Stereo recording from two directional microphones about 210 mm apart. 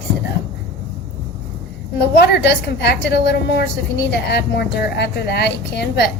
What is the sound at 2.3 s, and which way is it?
A woman's voice, 55° left (ahead or behind).